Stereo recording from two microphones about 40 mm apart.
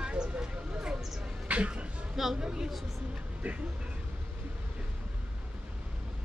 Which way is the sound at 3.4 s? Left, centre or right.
Right.